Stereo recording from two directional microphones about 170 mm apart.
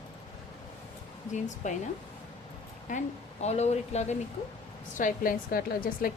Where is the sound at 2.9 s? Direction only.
45° left (ahead or behind).